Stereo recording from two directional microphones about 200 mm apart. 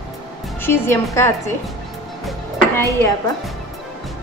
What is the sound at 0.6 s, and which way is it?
Speech, 10° left (ahead or behind).